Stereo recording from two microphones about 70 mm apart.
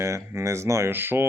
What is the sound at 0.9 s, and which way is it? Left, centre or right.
Speech, right.